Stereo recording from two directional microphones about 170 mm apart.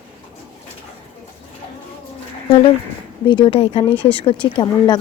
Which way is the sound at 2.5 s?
35° left (ahead or behind).